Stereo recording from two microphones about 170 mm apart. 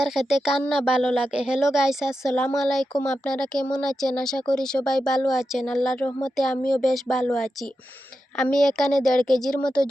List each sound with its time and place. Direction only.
0.0 s a woman's voice: centre (ahead or behind)
6.1 s speech: 20° left (ahead or behind)
6.3 s a woman's voice: centre (ahead or behind)